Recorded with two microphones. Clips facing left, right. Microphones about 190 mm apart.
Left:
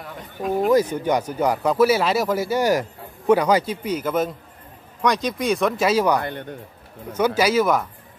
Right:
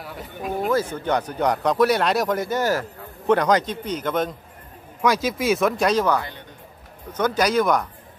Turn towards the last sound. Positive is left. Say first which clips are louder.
# left 1 dB
turn(degrees=5)  # may be behind; listen again after turning